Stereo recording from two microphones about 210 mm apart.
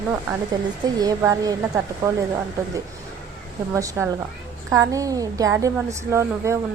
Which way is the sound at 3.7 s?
15° right (ahead or behind).